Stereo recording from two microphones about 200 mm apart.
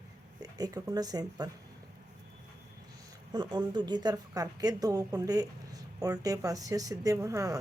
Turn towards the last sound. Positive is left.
turn(degrees=-15)  # may be behind; listen again after turning